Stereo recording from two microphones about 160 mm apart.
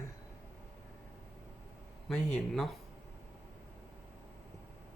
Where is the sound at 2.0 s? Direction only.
5° left (ahead or behind).